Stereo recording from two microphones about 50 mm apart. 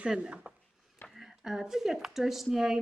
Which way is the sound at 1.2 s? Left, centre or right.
Centre.